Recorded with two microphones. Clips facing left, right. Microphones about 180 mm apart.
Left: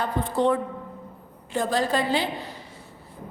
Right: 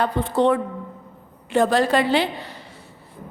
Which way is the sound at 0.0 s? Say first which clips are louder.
Right 4 dB; 70° right (ahead or behind).